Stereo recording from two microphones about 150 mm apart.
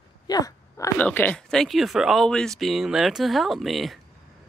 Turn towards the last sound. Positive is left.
turn(degrees=0)  # may be behind; listen again after turning